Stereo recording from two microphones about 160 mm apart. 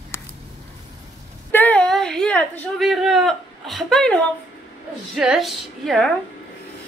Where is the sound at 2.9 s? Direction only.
Centre (ahead or behind).